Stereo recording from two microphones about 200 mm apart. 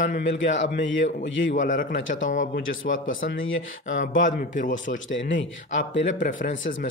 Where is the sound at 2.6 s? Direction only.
75° left (ahead or behind).